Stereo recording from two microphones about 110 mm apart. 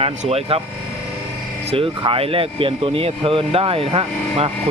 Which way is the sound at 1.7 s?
55° right (ahead or behind).